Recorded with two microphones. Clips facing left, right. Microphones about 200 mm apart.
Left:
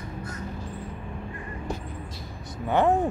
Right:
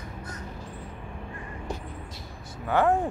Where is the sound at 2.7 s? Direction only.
20° left (ahead or behind).